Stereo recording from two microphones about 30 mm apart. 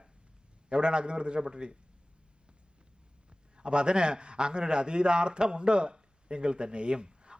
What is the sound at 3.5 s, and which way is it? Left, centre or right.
A man's voice, right.